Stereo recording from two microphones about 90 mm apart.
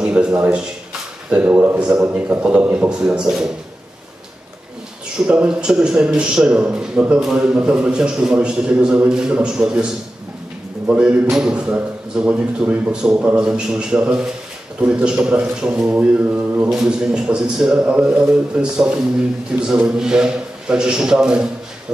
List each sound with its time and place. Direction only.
0.0 s a man's voice: 10° right (ahead or behind)
5.2 s a man's voice: 10° right (ahead or behind)
10.9 s a man's voice: 10° right (ahead or behind)